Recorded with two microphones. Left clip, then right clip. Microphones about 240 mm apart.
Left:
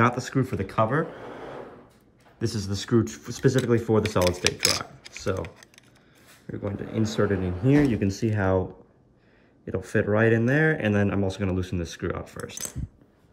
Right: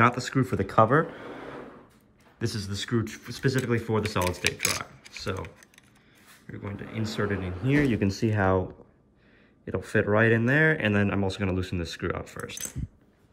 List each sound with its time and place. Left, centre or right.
0.0 s speech: centre
0.3 s speech: centre
2.3 s speech: centre
4.2 s speech: centre
5.4 s typing: centre
6.5 s speech: centre
9.7 s speech: centre